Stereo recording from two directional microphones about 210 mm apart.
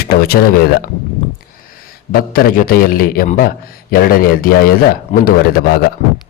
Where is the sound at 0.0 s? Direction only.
45° left (ahead or behind).